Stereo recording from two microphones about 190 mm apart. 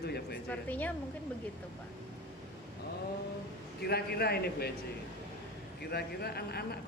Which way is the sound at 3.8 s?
55° left (ahead or behind).